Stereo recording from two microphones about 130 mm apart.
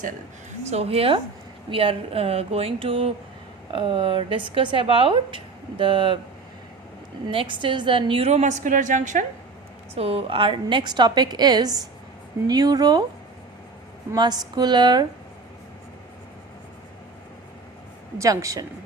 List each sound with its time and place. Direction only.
0.7 s a woman's voice: 50° right (ahead or behind)
7.3 s a woman's voice: 40° right (ahead or behind)
8.3 s a woman's voice: 65° right (ahead or behind)
9.9 s a woman's voice: 50° right (ahead or behind); by 13.1 s 30° right (ahead or behind)
14.2 s a woman's voice: 30° right (ahead or behind)
18.2 s a woman's voice: 25° right (ahead or behind)